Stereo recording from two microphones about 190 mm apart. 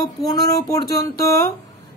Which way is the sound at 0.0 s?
20° left (ahead or behind).